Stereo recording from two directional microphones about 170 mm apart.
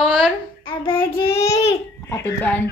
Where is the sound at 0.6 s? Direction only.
30° left (ahead or behind).